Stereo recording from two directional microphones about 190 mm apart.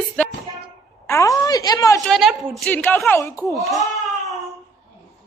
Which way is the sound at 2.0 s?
Centre (ahead or behind).